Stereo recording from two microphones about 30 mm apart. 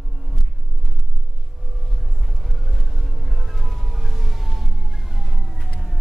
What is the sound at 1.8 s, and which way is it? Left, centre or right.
Vehicle, centre.